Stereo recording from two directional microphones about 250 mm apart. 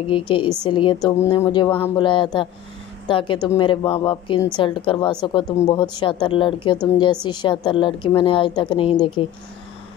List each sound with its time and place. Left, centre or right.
0.1 s a woman's voice: centre